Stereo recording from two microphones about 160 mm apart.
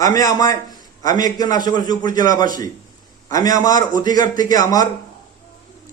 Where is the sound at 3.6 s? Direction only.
25° left (ahead or behind).